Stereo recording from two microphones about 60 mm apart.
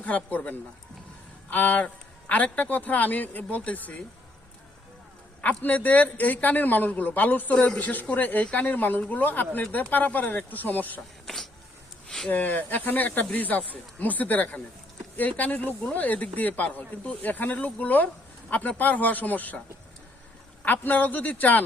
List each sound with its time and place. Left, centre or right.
0.3 s speech: left
5.4 s speech: left
12.0 s a sound: centre
12.3 s speech: left
20.7 s speech: left